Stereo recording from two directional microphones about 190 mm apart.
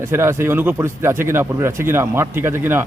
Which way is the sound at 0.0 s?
15° right (ahead or behind).